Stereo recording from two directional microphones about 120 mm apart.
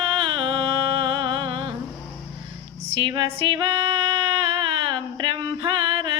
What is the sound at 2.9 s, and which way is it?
Music, 45° right (ahead or behind).